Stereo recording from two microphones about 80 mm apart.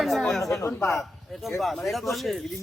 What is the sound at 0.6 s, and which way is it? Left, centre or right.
Speech, left.